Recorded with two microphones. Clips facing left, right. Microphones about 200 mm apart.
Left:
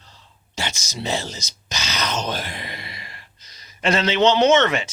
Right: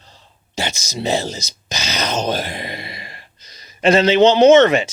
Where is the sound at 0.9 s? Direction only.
35° right (ahead or behind).